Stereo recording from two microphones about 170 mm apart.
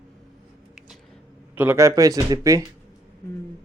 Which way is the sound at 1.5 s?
15° right (ahead or behind).